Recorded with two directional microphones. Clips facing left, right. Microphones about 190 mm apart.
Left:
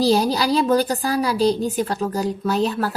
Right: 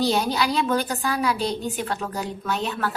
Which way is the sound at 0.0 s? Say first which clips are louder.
Left 4 dB; 35° left (ahead or behind).